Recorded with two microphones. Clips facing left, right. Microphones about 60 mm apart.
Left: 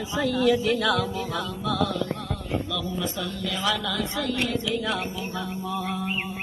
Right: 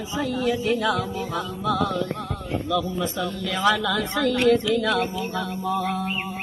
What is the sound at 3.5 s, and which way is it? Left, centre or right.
A woman's voice, right.